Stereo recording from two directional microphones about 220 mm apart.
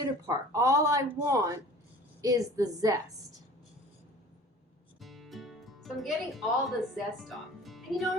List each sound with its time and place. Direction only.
0.0 s speech: 15° right (ahead or behind)
4.9 s speech: centre (ahead or behind)